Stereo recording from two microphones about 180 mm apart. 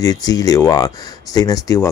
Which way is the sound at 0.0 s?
20° left (ahead or behind).